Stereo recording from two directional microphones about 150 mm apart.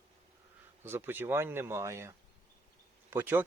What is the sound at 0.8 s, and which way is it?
Speech, 15° right (ahead or behind).